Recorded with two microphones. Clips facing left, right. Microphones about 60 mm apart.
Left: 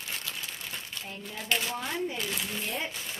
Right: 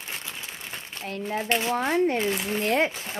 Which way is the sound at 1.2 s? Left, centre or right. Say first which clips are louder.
Right 6 dB; right.